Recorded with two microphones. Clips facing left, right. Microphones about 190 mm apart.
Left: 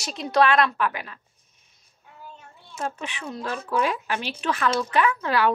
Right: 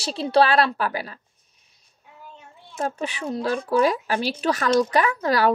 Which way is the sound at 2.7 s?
35° right (ahead or behind).